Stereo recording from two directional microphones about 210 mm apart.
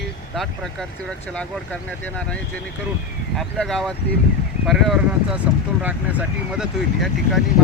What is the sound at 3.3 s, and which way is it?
Speech, centre (ahead or behind).